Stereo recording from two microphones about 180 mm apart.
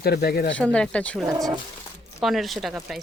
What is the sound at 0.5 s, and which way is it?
Speech, 5° left (ahead or behind).